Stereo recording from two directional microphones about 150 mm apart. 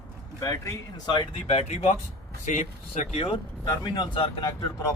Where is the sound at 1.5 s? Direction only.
45° left (ahead or behind).